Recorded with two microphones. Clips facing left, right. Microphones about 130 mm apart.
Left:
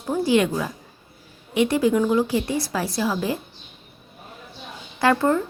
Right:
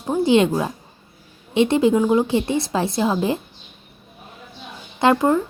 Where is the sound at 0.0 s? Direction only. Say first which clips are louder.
Right 3 dB; 25° right (ahead or behind).